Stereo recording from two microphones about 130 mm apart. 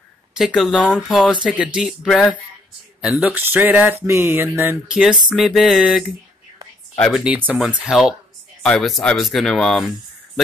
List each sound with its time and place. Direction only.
0.9 s speech: centre (ahead or behind); by 4.7 s 15° right (ahead or behind)
4.8 s speech: 5° right (ahead or behind)
7.2 s speech: 10° right (ahead or behind)